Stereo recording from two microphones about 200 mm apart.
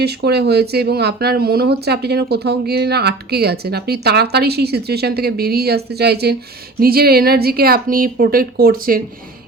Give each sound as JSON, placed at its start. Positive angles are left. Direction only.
{"t": 0.0, "sound": "speech", "side_deg": -55}